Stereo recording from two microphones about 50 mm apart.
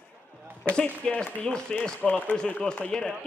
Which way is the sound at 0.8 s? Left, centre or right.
Centre.